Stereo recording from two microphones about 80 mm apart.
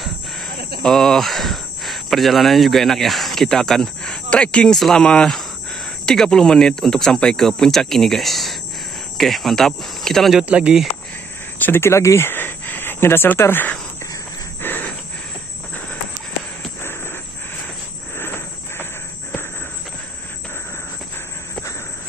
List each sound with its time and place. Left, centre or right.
0.8 s cricket: centre
6.0 s speech: centre
9.2 s cricket: centre
10.4 s speech: centre
11.5 s speech: left
14.6 s a sound: left
18.1 s a sound: left